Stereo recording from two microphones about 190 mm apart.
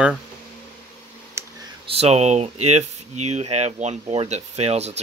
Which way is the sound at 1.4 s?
15° right (ahead or behind).